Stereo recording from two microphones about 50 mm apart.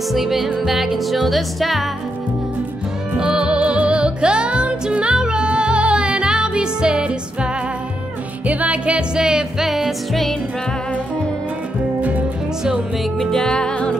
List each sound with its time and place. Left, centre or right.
0.1 s music: centre
3.2 s music: centre
8.5 s music: right; by 9.9 s centre
12.0 s music: right
13.2 s music: centre